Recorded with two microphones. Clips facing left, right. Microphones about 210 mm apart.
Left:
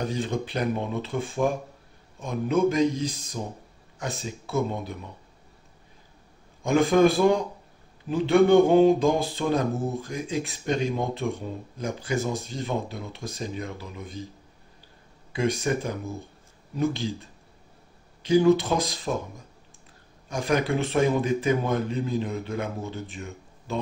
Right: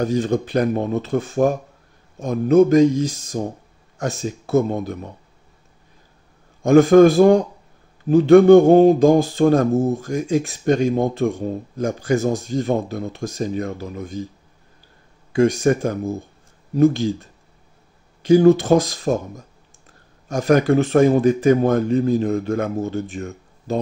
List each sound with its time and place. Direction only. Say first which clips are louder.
0.1 s speech: right 9 dB; 45° right (ahead or behind)
6.6 s speech: right 9 dB; 45° right (ahead or behind)
15.3 s speech: right 9 dB; 45° right (ahead or behind)
18.2 s speech: right 7 dB; 45° right (ahead or behind)